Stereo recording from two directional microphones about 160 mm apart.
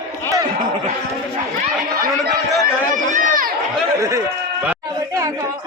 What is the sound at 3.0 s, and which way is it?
Run, 55° right (ahead or behind).